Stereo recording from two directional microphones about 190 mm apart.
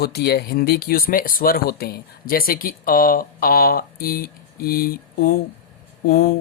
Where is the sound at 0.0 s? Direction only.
60° left (ahead or behind).